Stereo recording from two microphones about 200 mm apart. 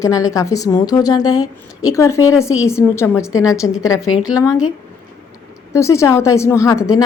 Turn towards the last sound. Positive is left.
turn(degrees=15)  # may be behind; listen again after turning